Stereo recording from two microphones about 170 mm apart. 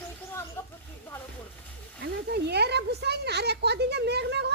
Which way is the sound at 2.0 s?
75° right (ahead or behind).